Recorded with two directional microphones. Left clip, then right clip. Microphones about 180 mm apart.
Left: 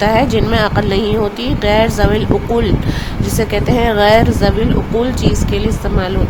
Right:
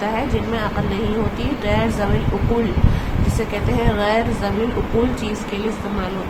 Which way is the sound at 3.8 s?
45° left (ahead or behind).